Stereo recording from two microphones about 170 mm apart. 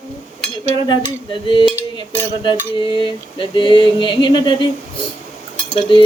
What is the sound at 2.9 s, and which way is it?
Cutlery, 30° left (ahead or behind).